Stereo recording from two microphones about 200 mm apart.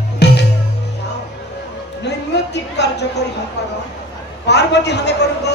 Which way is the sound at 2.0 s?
60° left (ahead or behind).